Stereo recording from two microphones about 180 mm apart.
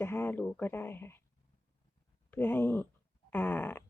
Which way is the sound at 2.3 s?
10° left (ahead or behind).